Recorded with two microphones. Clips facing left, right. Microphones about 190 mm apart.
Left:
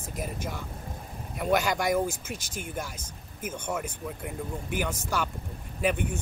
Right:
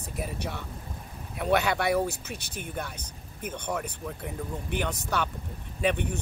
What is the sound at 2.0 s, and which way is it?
Speech, 60° right (ahead or behind).